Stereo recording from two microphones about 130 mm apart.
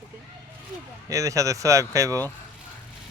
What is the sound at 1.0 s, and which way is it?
Speech, 25° right (ahead or behind).